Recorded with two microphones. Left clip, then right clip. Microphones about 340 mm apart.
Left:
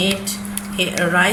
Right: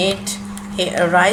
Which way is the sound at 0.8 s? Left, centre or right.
Right.